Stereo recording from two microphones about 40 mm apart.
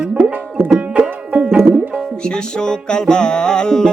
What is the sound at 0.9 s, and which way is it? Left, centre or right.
Music, right.